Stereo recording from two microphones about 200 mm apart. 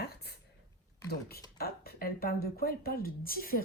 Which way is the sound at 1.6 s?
50° left (ahead or behind).